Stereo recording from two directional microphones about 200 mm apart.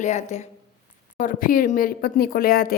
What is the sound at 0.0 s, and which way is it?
Speech, 35° left (ahead or behind).